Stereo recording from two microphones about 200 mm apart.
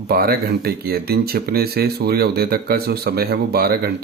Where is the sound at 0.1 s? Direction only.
50° right (ahead or behind).